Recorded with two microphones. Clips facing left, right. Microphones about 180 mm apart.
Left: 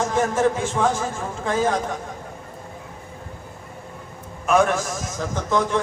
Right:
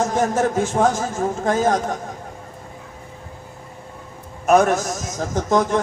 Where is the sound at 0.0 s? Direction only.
40° right (ahead or behind).